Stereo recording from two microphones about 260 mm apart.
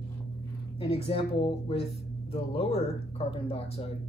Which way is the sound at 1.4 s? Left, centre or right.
Centre.